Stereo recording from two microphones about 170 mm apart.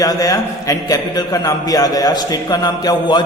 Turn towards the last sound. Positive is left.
turn(degrees=25)  # may be behind; listen again after turning